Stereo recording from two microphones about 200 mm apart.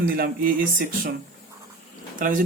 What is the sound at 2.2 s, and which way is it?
Speech, 40° right (ahead or behind).